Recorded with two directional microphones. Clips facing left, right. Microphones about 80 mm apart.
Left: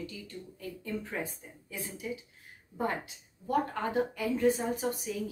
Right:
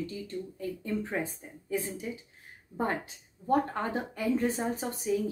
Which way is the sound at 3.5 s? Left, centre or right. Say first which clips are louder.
Right 2 dB; right.